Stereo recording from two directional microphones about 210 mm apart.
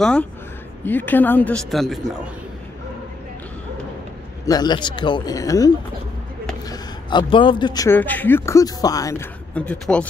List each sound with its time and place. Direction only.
0.0 s a man's voice: 5° left (ahead or behind)
4.5 s speech: 20° left (ahead or behind)
6.7 s a man's voice: 20° left (ahead or behind); by 10.0 s 5° left (ahead or behind)